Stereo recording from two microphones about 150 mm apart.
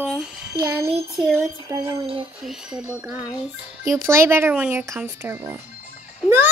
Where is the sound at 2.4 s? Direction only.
5° right (ahead or behind).